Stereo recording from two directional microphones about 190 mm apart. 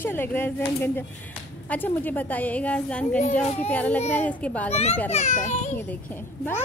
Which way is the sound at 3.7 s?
10° left (ahead or behind).